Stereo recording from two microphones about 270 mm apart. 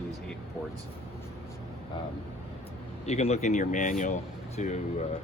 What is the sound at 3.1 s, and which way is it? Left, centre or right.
Speech, left.